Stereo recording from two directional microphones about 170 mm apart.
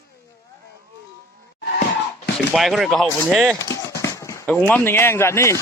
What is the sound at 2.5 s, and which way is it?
Speech, centre (ahead or behind).